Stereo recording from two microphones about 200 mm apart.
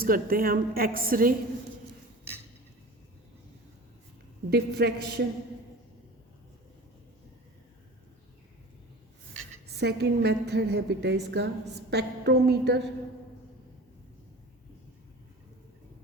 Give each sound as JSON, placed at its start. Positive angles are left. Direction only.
{"t": 0.0, "sound": "a woman's voice", "side_deg": -45}
{"t": 4.4, "sound": "a woman's voice", "side_deg": -55}
{"t": 9.8, "sound": "a woman's voice", "side_deg": -55}